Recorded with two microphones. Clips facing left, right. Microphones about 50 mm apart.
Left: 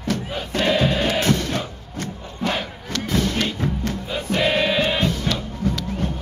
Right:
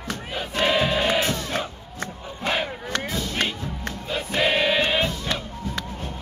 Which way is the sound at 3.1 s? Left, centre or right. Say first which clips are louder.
Left 7 dB; left.